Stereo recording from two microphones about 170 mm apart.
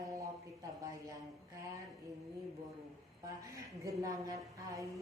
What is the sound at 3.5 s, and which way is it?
A woman's voice, 20° right (ahead or behind).